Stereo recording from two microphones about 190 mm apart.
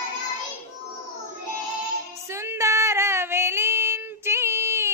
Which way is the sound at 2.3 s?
15° right (ahead or behind).